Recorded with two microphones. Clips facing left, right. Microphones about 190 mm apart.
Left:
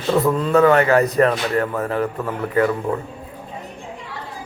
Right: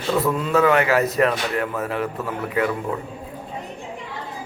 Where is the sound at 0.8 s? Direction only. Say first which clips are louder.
Left 3 dB; centre (ahead or behind).